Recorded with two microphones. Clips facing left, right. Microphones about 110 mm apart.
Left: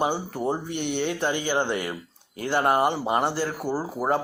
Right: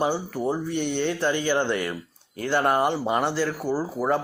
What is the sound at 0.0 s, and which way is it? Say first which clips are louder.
Speech: right 1 dB; 15° left (ahead or behind).